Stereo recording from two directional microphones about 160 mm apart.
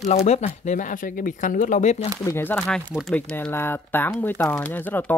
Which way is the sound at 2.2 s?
15° left (ahead or behind).